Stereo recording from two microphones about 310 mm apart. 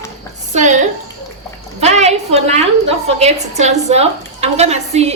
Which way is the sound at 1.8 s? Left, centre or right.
Right.